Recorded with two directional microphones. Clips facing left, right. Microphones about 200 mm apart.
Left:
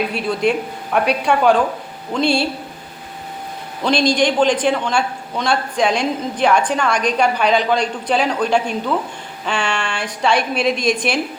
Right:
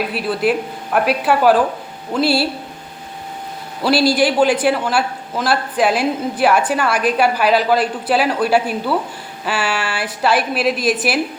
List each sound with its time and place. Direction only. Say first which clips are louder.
0.1 s a woman's voice: even; 5° right (ahead or behind)
3.8 s a man's voice: right 1 dB; 5° right (ahead or behind)